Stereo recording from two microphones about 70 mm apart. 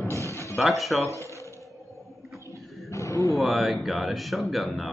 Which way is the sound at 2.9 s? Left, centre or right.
Left.